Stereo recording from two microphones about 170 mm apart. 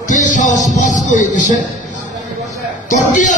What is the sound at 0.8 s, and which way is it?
Speech, 45° left (ahead or behind).